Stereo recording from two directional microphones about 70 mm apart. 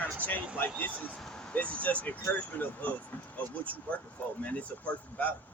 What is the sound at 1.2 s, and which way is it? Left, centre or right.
Speech, centre.